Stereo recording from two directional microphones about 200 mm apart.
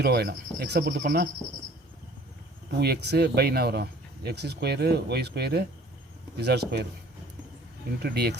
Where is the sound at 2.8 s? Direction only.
55° right (ahead or behind).